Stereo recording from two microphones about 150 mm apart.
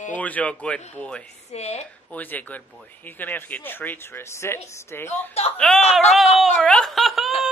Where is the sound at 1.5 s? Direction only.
45° left (ahead or behind).